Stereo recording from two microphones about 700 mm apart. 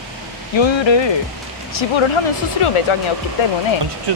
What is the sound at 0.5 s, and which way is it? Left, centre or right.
Speech, left.